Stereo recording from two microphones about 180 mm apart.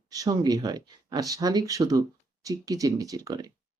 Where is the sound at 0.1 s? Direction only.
20° right (ahead or behind).